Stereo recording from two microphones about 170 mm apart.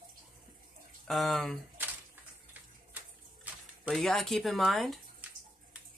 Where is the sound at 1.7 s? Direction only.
10° right (ahead or behind).